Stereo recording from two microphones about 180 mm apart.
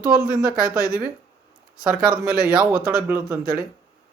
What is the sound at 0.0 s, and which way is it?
Speech, 5° right (ahead or behind).